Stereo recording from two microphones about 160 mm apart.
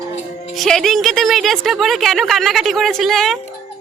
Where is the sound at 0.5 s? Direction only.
Centre (ahead or behind).